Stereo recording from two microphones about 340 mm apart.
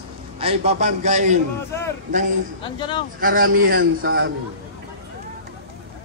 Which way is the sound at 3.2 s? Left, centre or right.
Right.